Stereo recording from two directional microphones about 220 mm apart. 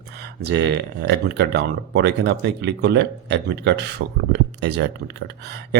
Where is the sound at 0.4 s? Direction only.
50° right (ahead or behind).